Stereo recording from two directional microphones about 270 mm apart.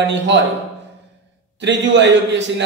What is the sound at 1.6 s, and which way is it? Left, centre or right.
Speech, right.